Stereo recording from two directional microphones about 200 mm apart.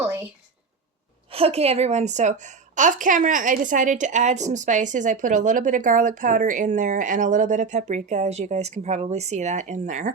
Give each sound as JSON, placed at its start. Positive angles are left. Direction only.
{"t": 1.3, "sound": "a woman's voice", "side_deg": -30}